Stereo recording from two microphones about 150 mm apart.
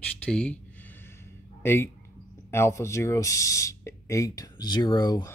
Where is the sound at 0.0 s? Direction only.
5° left (ahead or behind).